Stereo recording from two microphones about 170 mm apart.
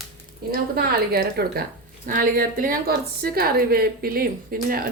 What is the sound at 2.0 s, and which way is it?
Speech, 55° right (ahead or behind).